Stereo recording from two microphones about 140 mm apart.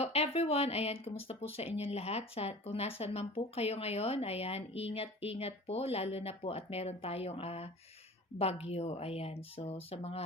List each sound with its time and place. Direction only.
0.0 s speech: 45° left (ahead or behind)